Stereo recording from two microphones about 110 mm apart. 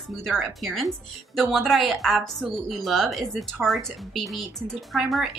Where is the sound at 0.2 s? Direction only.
Centre (ahead or behind).